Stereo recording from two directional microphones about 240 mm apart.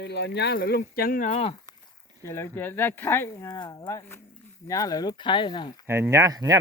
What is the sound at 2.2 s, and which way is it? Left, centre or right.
Speech, centre.